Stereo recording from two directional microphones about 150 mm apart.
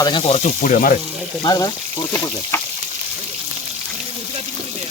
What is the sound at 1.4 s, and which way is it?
Speech, 25° left (ahead or behind).